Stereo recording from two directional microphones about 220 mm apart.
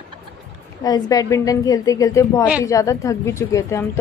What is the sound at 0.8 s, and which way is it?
Speech, 15° left (ahead or behind).